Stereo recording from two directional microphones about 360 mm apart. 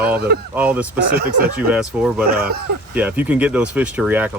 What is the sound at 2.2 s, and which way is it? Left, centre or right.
Speech, right.